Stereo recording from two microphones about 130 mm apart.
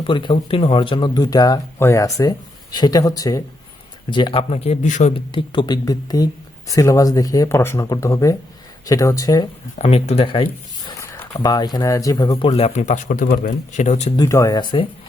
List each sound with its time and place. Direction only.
0.0 s speech: 40° left (ahead or behind)
4.1 s speech: 40° left (ahead or behind); by 5.1 s 65° left (ahead or behind)
5.1 s speech: 40° left (ahead or behind)
9.7 s speech: 55° left (ahead or behind)
11.0 s speech: 20° left (ahead or behind)
12.5 s speech: 55° left (ahead or behind)
14.2 s speech: 25° left (ahead or behind)
14.6 s speech: 35° left (ahead or behind)